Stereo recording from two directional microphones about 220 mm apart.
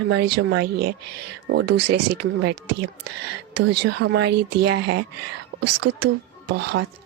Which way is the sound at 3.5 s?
50° right (ahead or behind).